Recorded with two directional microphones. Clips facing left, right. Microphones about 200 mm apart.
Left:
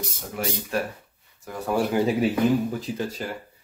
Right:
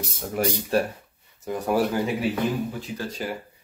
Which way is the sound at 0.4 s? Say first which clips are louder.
Right 4 dB; 40° right (ahead or behind).